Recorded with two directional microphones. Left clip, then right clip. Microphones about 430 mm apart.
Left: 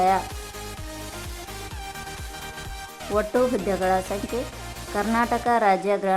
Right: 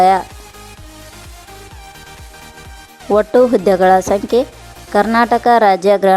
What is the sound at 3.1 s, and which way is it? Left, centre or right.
A woman's voice, centre.